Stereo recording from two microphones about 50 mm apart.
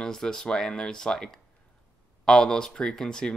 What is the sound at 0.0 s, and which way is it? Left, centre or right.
Speech, centre.